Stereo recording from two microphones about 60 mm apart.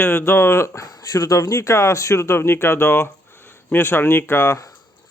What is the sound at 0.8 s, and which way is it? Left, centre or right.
Speech, left.